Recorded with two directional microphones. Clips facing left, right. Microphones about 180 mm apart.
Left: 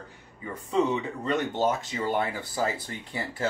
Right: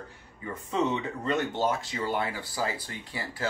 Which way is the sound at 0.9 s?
15° left (ahead or behind).